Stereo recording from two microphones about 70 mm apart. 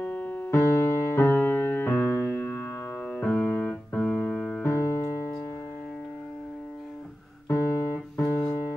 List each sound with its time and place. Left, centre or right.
0.0 s music: left
4.6 s piano: left
7.4 s music: left